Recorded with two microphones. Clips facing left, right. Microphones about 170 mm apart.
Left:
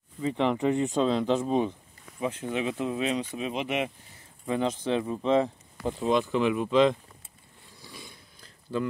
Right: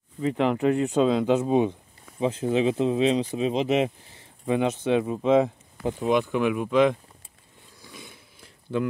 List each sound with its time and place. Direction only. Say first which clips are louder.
0.4 s speech: right 2 dB; 5° right (ahead or behind); by 3.9 s 30° right (ahead or behind)
4.5 s speech: right 4 dB; 15° right (ahead or behind)
7.9 s a sound: right 2 dB; 5° right (ahead or behind)